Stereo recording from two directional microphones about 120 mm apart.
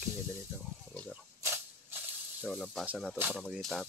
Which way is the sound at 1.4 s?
20° right (ahead or behind).